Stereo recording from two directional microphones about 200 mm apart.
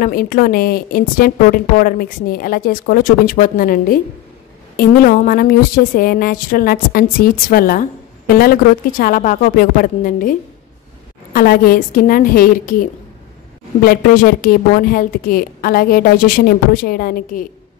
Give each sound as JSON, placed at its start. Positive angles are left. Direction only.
{"t": 0.0, "sound": "a woman's voice", "side_deg": 45}
{"t": 11.3, "sound": "a woman's voice", "side_deg": 45}
{"t": 13.8, "sound": "a woman's voice", "side_deg": 45}